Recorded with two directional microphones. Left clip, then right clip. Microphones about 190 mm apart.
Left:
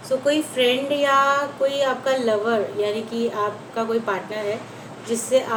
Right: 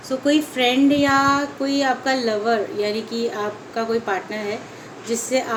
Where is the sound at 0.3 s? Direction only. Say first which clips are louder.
Right 2 dB; 55° right (ahead or behind).